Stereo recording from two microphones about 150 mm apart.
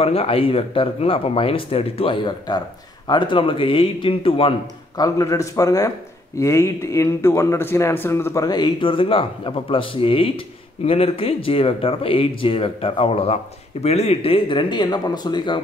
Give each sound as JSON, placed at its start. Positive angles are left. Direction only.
{"t": 0.0, "sound": "speech", "side_deg": 40}
{"t": 4.9, "sound": "speech", "side_deg": 25}